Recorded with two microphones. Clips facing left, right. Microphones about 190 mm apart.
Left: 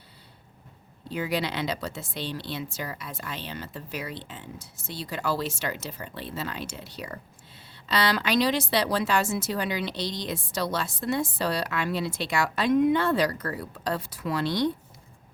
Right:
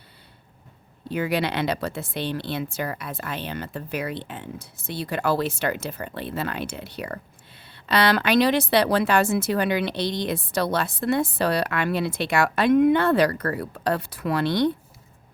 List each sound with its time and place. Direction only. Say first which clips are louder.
1.1 s speech: right 4 dB; 60° right (ahead or behind)